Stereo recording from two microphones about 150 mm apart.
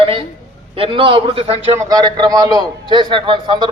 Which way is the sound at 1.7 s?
25° right (ahead or behind).